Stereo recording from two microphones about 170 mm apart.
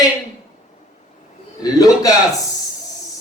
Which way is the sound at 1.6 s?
20° left (ahead or behind).